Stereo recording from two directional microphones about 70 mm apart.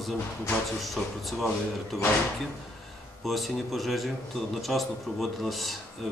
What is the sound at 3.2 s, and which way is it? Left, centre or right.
A man's voice, centre.